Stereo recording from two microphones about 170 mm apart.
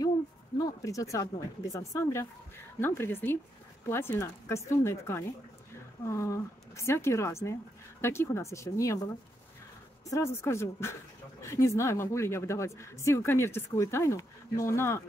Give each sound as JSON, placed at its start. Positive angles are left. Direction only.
{"t": 0.6, "sound": "speech", "side_deg": 20}